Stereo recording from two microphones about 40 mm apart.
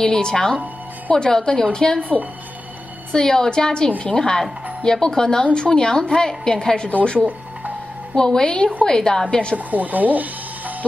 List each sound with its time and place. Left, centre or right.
0.0 s a woman's voice: left
2.0 s speech: right
3.1 s a woman's voice: centre
8.1 s a woman's voice: centre
9.7 s speech: right